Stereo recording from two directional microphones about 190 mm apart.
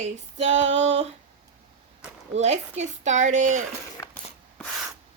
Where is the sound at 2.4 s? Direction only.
35° right (ahead or behind).